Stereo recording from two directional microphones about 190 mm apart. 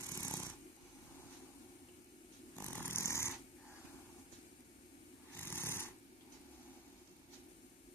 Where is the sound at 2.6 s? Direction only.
10° left (ahead or behind).